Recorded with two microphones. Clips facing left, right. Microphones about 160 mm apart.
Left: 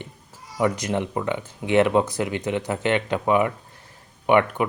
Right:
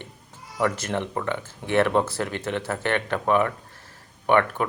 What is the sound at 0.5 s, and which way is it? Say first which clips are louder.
Speech: left 2 dB; 15° left (ahead or behind).